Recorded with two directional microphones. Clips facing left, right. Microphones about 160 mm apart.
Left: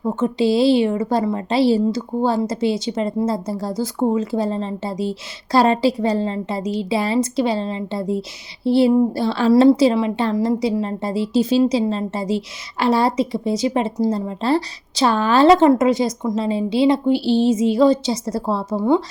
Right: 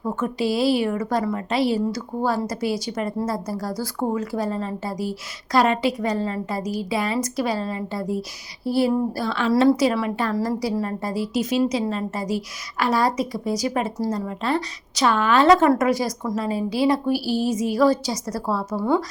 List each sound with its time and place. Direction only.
0.0 s a woman's voice: 25° left (ahead or behind)